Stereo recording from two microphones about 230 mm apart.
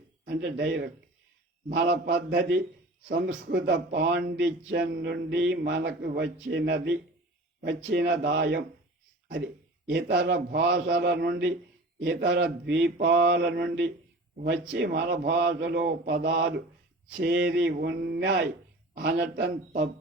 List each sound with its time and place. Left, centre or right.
0.3 s a man's voice: right
9.9 s a man's voice: right